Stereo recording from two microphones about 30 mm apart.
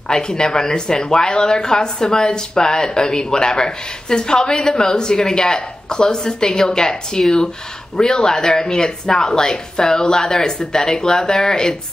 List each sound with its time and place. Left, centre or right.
0.1 s speech: left